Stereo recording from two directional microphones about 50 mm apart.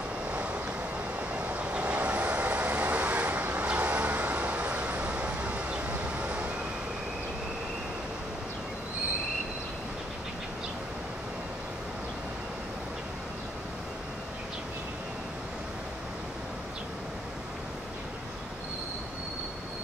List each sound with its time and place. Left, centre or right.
0.3 s vehicle: right
1.3 s train: right